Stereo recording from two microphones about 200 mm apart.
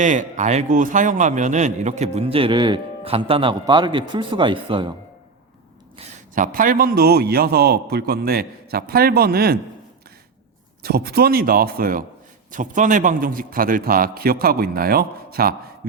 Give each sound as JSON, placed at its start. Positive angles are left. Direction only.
{"t": 0.0, "sound": "a man's voice", "side_deg": -40}
{"t": 6.0, "sound": "a man's voice", "side_deg": -40}
{"t": 10.8, "sound": "a man's voice", "side_deg": -50}